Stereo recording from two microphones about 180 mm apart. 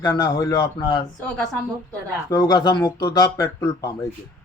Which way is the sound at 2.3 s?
20° left (ahead or behind).